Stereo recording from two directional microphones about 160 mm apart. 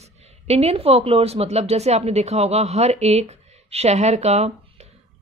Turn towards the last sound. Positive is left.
turn(degrees=-40)  # may be behind; listen again after turning